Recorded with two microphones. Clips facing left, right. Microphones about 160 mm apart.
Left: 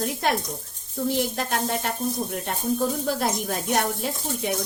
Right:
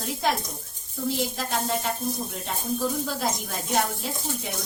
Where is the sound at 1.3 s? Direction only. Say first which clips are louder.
Left 2 dB; 60° left (ahead or behind).